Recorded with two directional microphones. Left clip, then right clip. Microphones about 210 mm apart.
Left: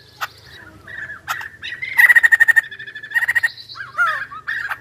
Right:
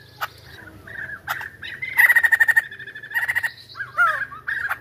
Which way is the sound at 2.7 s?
35° left (ahead or behind).